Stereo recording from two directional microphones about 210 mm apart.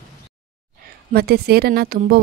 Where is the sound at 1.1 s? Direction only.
50° right (ahead or behind).